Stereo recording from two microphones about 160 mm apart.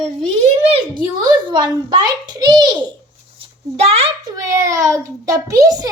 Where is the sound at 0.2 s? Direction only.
40° right (ahead or behind).